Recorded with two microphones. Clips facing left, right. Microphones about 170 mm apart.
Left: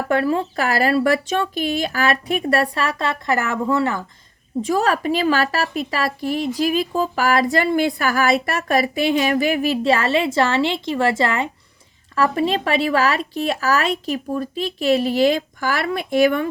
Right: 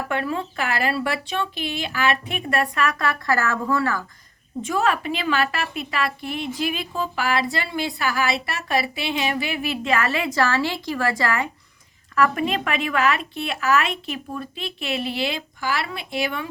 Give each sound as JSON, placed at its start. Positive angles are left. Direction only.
{"t": 0.1, "sound": "speech", "side_deg": 35}
{"t": 4.6, "sound": "speech", "side_deg": 35}